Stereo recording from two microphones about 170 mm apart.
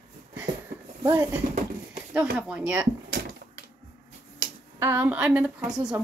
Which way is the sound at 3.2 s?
85° right.